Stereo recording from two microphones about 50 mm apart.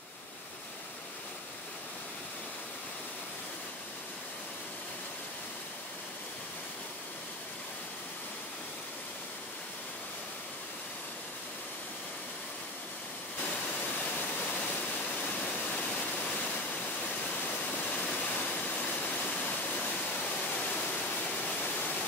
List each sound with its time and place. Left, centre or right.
15.0 s waterfall: left
20.2 s a sound: left
21.3 s waterfall: left